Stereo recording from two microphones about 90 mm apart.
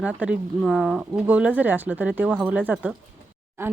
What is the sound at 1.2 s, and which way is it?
Speech, 15° right (ahead or behind).